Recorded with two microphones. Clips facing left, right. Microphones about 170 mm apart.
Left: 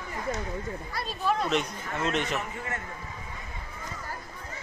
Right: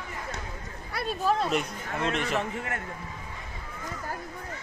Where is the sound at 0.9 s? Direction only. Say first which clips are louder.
Right 3 dB; 60° right (ahead or behind).